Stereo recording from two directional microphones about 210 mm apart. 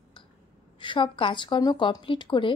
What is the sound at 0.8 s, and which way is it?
A woman's voice, 25° left (ahead or behind).